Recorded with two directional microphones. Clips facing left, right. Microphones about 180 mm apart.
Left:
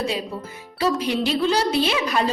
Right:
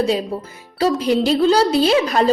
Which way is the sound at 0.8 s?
35° right (ahead or behind).